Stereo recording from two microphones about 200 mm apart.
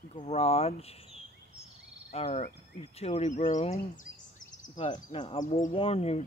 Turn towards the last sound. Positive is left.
turn(degrees=30)  # may be behind; listen again after turning